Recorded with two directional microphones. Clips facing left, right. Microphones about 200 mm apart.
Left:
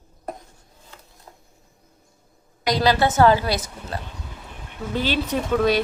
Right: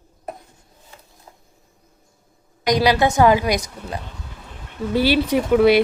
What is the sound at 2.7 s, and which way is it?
A woman's voice, 15° right (ahead or behind).